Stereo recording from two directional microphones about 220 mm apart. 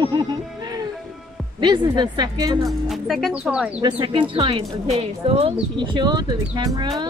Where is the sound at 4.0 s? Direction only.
20° right (ahead or behind).